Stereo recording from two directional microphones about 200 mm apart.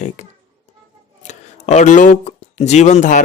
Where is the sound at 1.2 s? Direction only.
35° left (ahead or behind).